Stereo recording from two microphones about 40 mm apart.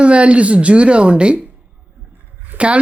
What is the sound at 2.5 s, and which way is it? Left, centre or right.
Speech, right.